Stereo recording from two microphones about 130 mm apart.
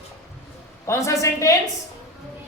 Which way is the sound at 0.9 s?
25° left (ahead or behind).